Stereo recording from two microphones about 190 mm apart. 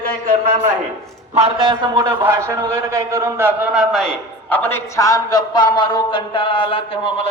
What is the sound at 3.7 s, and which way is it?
A man's voice, centre (ahead or behind).